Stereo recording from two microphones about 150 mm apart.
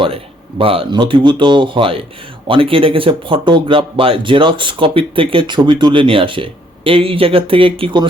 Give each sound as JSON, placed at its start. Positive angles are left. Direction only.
{"t": 0.6, "sound": "speech", "side_deg": -35}